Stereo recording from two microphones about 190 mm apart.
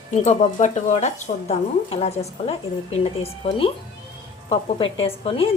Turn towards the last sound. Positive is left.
turn(degrees=30)  # may be behind; listen again after turning